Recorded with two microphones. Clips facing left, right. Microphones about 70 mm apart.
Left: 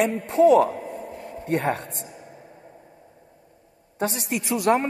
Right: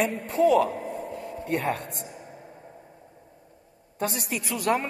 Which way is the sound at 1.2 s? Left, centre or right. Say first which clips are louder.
Left 4 dB; left.